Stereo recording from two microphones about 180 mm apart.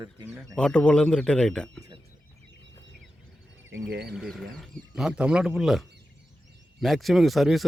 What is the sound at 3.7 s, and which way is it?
Speech, 75° right (ahead or behind).